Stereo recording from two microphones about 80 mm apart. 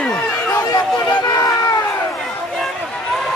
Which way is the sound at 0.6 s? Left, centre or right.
Left.